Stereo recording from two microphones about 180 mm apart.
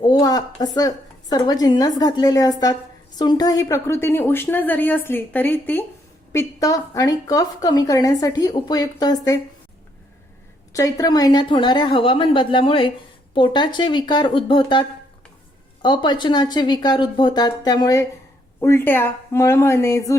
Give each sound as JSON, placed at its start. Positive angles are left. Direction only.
{"t": 0.0, "sound": "a woman's voice", "side_deg": 25}
{"t": 10.7, "sound": "a woman's voice", "side_deg": 20}